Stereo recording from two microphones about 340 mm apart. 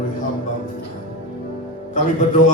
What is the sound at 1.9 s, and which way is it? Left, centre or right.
Speech, left.